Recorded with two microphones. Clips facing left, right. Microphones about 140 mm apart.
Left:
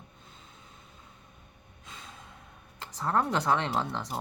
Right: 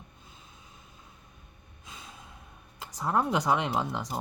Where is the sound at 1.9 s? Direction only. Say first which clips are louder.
Even; 5° right (ahead or behind).